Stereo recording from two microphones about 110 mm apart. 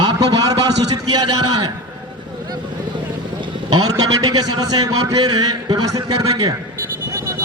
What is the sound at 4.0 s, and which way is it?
Speech, 35° right (ahead or behind).